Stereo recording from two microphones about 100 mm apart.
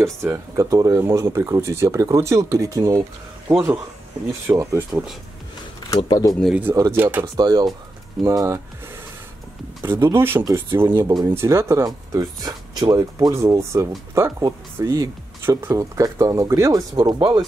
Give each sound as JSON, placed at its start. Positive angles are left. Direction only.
{"t": 0.0, "sound": "speech", "side_deg": -30}
{"t": 0.9, "sound": "speech", "side_deg": -25}
{"t": 4.5, "sound": "speech", "side_deg": -15}
{"t": 5.9, "sound": "speech", "side_deg": 40}
{"t": 6.7, "sound": "speech", "side_deg": -30}
{"t": 7.0, "sound": "speech", "side_deg": -20}
{"t": 7.3, "sound": "speech", "side_deg": -45}
{"t": 9.8, "sound": "speech", "side_deg": -25}
{"t": 12.9, "sound": "speech", "side_deg": -30}
{"t": 16.9, "sound": "speech", "side_deg": -45}